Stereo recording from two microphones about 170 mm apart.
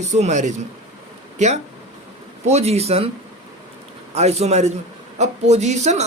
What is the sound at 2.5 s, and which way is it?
Speech, 40° right (ahead or behind).